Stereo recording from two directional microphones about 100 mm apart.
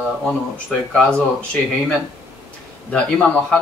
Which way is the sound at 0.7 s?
10° left (ahead or behind).